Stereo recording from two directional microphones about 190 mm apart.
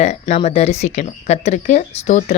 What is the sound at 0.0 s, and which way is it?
Speech, 35° left (ahead or behind).